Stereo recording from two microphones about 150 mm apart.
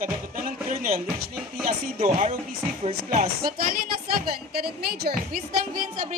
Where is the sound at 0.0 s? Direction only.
70° right (ahead or behind).